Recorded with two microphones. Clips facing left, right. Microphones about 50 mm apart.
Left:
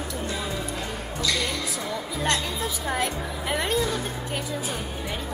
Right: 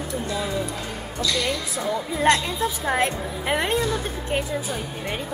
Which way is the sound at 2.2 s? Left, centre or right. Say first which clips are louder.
Right 7 dB; right.